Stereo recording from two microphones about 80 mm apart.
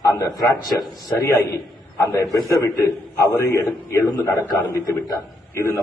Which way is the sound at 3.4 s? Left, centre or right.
Left.